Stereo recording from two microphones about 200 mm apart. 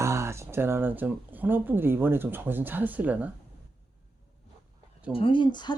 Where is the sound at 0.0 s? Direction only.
15° right (ahead or behind).